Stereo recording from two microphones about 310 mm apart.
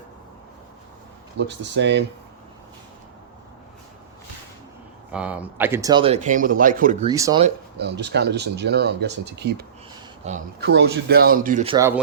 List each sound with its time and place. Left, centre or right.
1.4 s speech: right
5.1 s speech: centre; by 7.1 s right
7.1 s speech: centre
7.4 s speech: right; by 11.9 s centre